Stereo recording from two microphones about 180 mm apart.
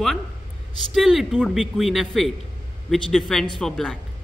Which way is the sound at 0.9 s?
Centre (ahead or behind).